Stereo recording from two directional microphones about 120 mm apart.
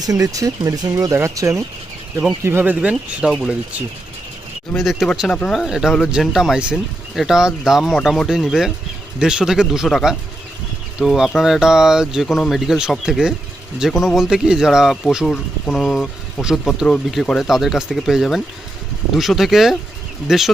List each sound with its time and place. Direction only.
0.0 s speech: 30° right (ahead or behind)
2.9 s speech: centre (ahead or behind)
4.7 s speech: centre (ahead or behind)